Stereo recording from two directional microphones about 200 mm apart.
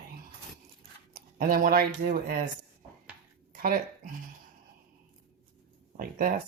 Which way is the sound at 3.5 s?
45° right (ahead or behind).